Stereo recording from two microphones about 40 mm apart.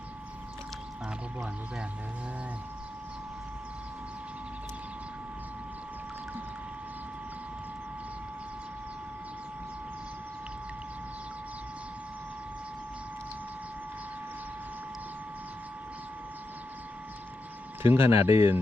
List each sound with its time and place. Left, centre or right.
17.8 s speech: right